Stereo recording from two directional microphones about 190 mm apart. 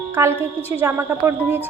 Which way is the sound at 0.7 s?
10° right (ahead or behind).